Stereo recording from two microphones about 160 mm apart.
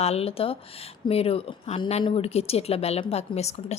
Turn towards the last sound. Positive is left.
turn(degrees=45)  # may be behind; listen again after turning